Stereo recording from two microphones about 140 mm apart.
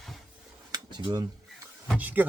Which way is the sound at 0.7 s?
30° right (ahead or behind).